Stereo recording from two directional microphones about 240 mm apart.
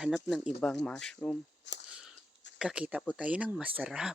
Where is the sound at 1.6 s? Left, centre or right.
Left.